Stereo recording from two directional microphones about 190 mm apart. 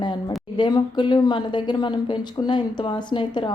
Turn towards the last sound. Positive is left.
turn(degrees=25)  # may be behind; listen again after turning